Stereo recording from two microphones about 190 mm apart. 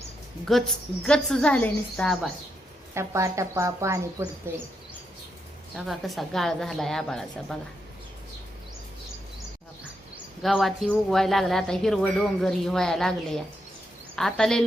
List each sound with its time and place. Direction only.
0.5 s speech: centre (ahead or behind)
2.9 s speech: 15° right (ahead or behind)
5.7 s speech: centre (ahead or behind)
10.4 s speech: centre (ahead or behind)